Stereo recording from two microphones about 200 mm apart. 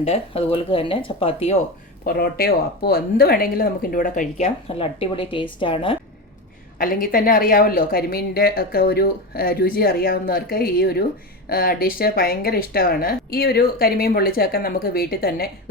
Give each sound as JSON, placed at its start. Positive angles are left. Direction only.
{"t": 0.0, "sound": "speech", "side_deg": 30}
{"t": 2.0, "sound": "speech", "side_deg": 50}
{"t": 6.7, "sound": "speech", "side_deg": 45}